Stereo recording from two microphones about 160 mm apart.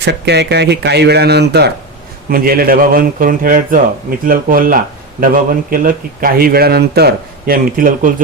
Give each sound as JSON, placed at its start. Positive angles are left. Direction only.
{"t": 0.0, "sound": "speech", "side_deg": -90}
{"t": 2.3, "sound": "a man's voice", "side_deg": -65}